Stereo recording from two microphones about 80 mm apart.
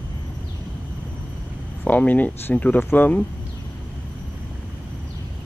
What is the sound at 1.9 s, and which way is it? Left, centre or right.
Speech, centre.